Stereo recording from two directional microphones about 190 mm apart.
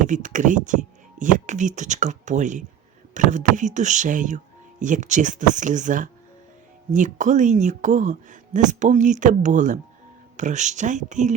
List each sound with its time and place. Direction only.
0.0 s speech: 40° right (ahead or behind)